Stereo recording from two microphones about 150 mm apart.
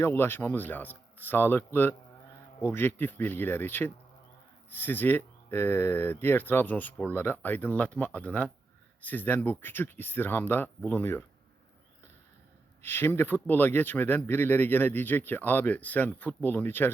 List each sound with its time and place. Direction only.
0.0 s speech: 15° left (ahead or behind)
12.8 s speech: 15° left (ahead or behind)